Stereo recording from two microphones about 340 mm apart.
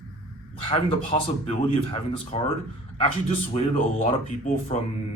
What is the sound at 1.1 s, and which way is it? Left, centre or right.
A man's voice, centre.